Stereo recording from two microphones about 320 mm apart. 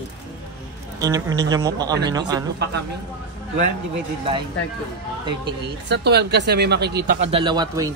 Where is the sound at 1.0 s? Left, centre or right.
Centre.